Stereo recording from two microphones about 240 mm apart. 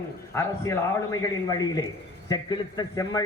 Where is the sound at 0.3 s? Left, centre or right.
Centre.